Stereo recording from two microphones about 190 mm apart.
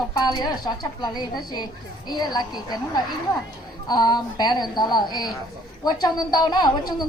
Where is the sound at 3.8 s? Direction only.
20° left (ahead or behind).